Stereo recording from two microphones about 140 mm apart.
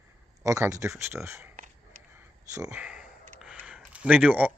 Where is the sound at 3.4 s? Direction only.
5° right (ahead or behind).